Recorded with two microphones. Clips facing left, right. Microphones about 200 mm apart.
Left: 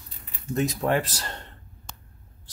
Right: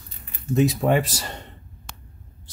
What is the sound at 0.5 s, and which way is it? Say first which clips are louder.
Speech: right 5 dB; 5° right (ahead or behind).